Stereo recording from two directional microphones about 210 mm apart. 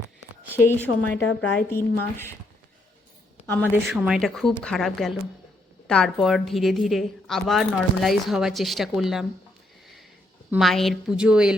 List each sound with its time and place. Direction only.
1.1 s speech: 5° left (ahead or behind)
3.4 s a woman's voice: 10° left (ahead or behind)
3.7 s a woman's voice: 5° right (ahead or behind)
10.5 s a woman's voice: centre (ahead or behind)